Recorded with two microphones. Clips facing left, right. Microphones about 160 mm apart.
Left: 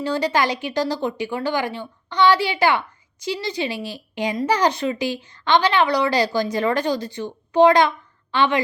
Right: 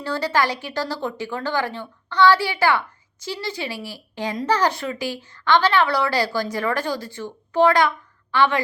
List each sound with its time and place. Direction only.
0.0 s a woman's voice: 15° left (ahead or behind)